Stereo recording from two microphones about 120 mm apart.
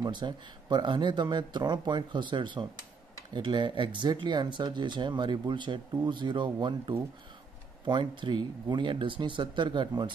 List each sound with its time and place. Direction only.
0.0 s speech: 40° right (ahead or behind)